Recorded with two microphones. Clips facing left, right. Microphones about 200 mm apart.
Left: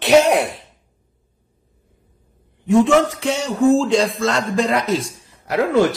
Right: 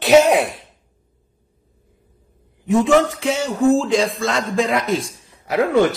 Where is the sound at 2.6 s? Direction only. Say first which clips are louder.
Left 1 dB; centre (ahead or behind).